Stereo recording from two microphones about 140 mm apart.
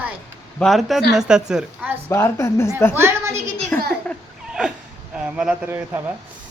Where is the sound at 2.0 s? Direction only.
20° left (ahead or behind).